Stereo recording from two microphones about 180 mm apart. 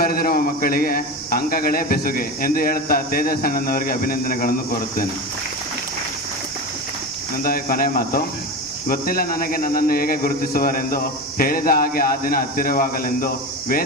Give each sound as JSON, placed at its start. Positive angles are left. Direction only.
{"t": 0.0, "sound": "a man's voice", "side_deg": 55}
{"t": 7.4, "sound": "a man's voice", "side_deg": 55}